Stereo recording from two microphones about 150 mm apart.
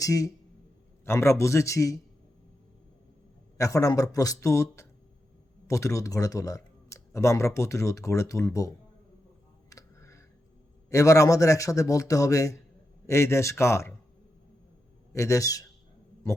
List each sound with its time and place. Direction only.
0.0 s speech: 25° left (ahead or behind)
3.6 s speech: 20° left (ahead or behind)
9.6 s a sound: 20° left (ahead or behind)
10.8 s speech: 20° left (ahead or behind)
15.1 s speech: 20° left (ahead or behind)